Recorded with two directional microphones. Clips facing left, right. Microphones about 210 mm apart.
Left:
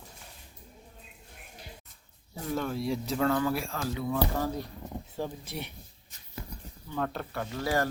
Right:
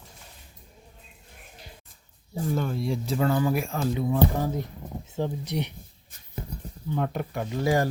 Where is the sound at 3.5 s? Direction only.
15° right (ahead or behind).